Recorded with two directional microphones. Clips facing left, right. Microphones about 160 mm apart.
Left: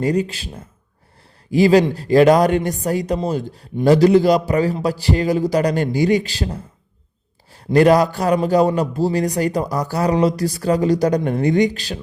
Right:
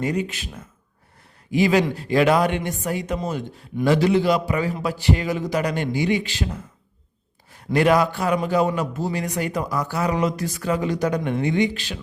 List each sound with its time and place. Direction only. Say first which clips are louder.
0.0 s speech: left 5 dB; 35° left (ahead or behind)